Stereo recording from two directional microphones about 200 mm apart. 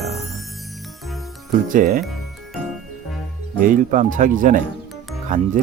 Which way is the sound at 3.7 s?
40° right (ahead or behind).